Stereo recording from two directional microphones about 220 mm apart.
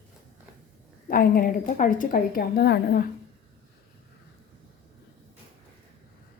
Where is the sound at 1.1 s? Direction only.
40° left (ahead or behind).